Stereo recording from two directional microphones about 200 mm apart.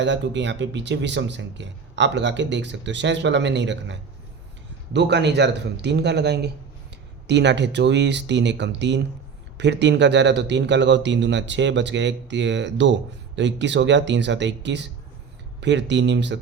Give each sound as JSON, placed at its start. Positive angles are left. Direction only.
{"t": 0.0, "sound": "speech", "side_deg": -65}
{"t": 4.9, "sound": "speech", "side_deg": -60}